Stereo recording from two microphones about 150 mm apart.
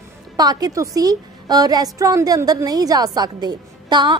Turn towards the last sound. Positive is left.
turn(degrees=-30)  # may be behind; listen again after turning